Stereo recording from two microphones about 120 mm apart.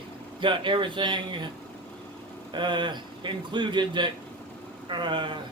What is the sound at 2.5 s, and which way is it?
A man's voice, 40° right (ahead or behind).